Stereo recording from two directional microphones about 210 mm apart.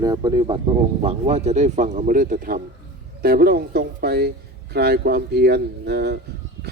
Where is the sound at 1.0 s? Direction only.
30° right (ahead or behind).